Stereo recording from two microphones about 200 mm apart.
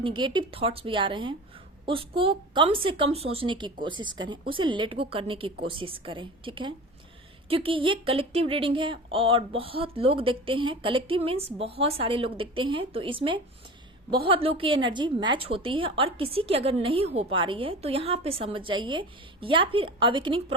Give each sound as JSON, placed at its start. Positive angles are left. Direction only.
{"t": 0.0, "sound": "a woman's voice", "side_deg": -25}